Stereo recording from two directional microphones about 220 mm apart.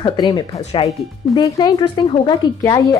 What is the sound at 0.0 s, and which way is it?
A woman's voice, 20° left (ahead or behind).